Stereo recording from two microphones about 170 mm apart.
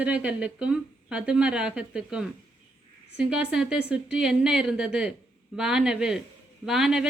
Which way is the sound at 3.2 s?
5° right (ahead or behind).